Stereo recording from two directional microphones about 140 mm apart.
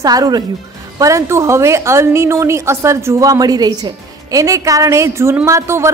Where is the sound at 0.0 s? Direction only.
25° right (ahead or behind).